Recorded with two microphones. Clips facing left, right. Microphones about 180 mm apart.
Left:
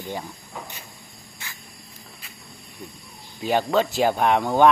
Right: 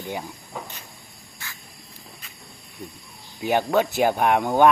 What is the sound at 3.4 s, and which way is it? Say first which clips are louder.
Speech: even; 15° right (ahead or behind).